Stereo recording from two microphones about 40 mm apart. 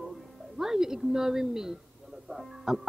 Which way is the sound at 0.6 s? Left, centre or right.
Centre.